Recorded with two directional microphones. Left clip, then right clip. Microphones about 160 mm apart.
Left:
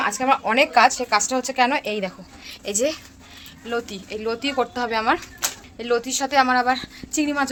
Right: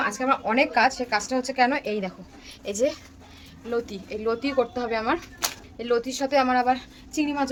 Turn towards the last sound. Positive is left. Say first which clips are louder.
# left 4 dB
turn(degrees=10)  # may be behind; listen again after turning